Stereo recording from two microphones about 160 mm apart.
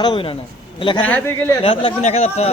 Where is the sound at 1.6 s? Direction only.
40° left (ahead or behind).